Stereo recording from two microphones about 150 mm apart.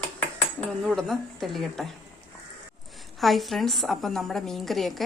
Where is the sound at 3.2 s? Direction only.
Centre (ahead or behind).